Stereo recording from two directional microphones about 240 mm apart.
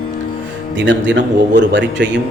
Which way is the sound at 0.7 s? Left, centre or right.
Right.